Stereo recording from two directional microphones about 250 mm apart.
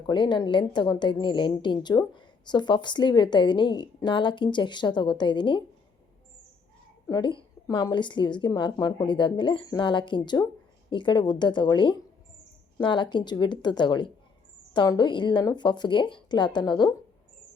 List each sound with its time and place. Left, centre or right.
0.0 s a woman's voice: centre
7.1 s a woman's voice: centre